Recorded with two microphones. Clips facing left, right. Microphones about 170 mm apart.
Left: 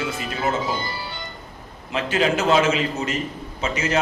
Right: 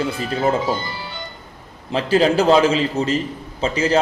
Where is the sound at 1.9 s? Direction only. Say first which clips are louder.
Right 5 dB; 35° right (ahead or behind).